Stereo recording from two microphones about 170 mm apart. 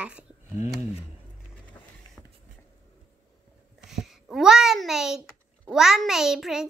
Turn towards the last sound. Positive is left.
turn(degrees=0)  # may be behind; listen again after turning